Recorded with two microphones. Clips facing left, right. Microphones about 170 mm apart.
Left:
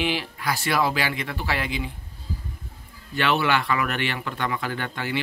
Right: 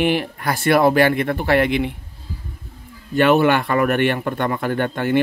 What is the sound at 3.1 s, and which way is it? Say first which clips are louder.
Speech: right 8 dB; 50° right (ahead or behind).